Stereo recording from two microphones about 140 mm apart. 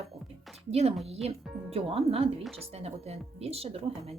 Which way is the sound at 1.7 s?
45° right (ahead or behind).